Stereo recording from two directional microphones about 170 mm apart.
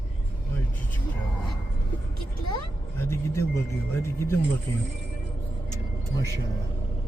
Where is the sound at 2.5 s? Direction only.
15° left (ahead or behind).